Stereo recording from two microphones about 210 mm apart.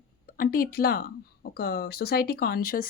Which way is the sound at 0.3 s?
45° left (ahead or behind).